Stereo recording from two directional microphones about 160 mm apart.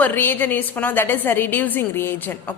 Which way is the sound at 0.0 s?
15° left (ahead or behind).